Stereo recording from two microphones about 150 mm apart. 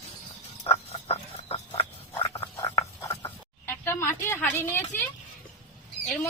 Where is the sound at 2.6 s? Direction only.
20° left (ahead or behind).